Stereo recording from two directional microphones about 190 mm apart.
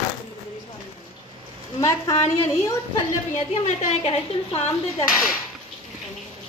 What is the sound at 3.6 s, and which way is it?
Speech, 35° left (ahead or behind).